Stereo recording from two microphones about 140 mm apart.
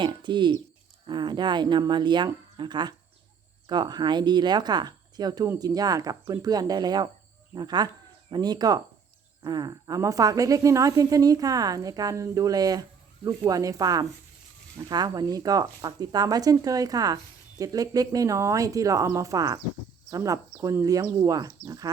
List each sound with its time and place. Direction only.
0.0 s speech: 35° right (ahead or behind)